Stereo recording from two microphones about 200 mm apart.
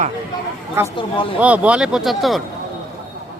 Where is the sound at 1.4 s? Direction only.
5° right (ahead or behind).